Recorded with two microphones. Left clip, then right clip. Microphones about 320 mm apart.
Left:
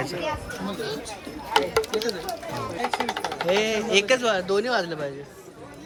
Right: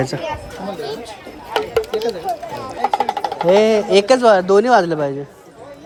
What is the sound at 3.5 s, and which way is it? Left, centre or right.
Speech, right.